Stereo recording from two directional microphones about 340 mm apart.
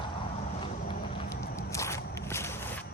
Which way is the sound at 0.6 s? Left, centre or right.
Centre.